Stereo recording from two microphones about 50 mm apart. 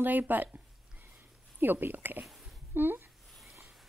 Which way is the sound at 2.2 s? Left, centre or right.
Centre.